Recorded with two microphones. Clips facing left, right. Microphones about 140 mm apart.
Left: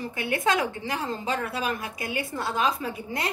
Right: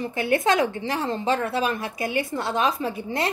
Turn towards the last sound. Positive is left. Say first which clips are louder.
# right 5 dB
turn(degrees=-30)  # may be behind; listen again after turning